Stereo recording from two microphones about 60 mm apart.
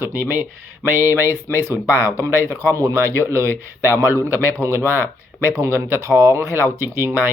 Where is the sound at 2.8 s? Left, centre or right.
Right.